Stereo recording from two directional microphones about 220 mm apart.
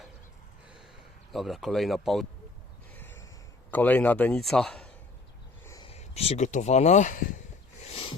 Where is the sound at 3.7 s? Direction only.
5° left (ahead or behind).